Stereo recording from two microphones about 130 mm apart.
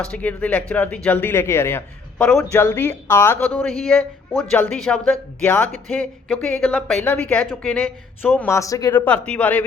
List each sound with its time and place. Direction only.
0.0 s speech: 10° left (ahead or behind)
8.3 s speech: 20° left (ahead or behind)
8.9 s speech: 15° left (ahead or behind)